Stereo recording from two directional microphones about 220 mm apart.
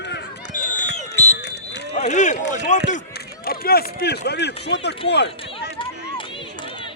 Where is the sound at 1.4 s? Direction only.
50° left (ahead or behind).